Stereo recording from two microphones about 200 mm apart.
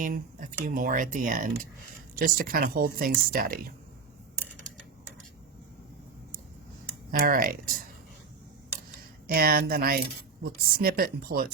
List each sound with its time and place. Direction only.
0.0 s speech: 40° right (ahead or behind)
7.1 s speech: 45° right (ahead or behind)
9.2 s speech: 50° right (ahead or behind)